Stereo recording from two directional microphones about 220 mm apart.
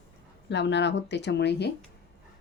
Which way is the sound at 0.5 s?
50° left (ahead or behind).